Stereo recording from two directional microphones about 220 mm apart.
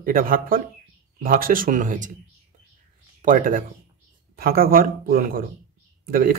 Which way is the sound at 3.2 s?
40° right (ahead or behind).